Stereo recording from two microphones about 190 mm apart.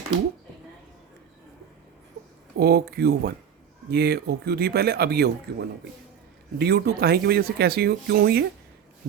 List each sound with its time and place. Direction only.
2.6 s speech: 55° right (ahead or behind)